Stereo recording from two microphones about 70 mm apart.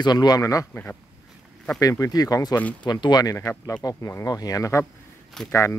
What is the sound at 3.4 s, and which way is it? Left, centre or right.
Speech, left.